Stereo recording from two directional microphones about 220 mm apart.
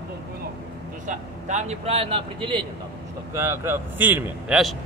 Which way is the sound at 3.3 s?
10° right (ahead or behind).